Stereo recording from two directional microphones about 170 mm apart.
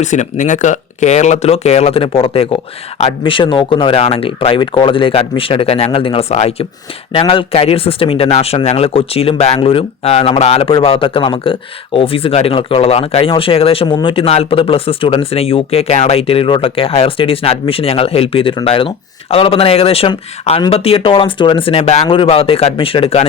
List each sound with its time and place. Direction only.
0.0 s speech: 45° left (ahead or behind)